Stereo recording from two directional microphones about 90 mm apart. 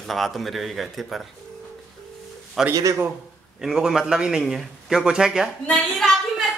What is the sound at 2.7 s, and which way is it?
Speech, 40° right (ahead or behind).